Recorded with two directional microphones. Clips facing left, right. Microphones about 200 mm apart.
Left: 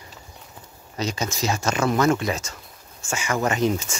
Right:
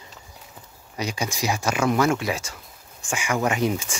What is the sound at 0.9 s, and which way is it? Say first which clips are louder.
Speech: left 1 dB; 10° right (ahead or behind).